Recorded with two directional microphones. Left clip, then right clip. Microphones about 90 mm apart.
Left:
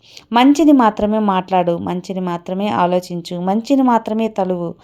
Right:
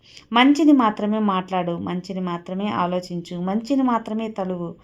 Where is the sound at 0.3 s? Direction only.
45° left (ahead or behind).